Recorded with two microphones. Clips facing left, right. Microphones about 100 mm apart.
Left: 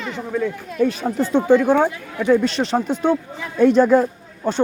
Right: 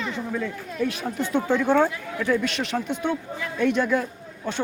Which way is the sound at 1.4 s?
15° left (ahead or behind).